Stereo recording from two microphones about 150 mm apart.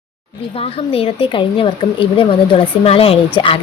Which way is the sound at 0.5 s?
40° left (ahead or behind).